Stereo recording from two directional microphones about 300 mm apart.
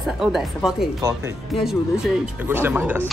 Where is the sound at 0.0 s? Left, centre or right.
Centre.